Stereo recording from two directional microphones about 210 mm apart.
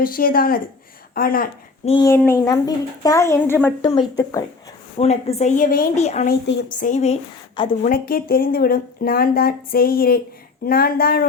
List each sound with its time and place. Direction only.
0.0 s speech: 45° left (ahead or behind)
1.8 s speech: 30° left (ahead or behind)
2.0 s speech: 10° left (ahead or behind)
4.9 s speech: 30° left (ahead or behind)
6.2 s a woman's voice: 60° left (ahead or behind)
6.7 s speech: 35° left (ahead or behind)
7.9 s speech: 45° left (ahead or behind)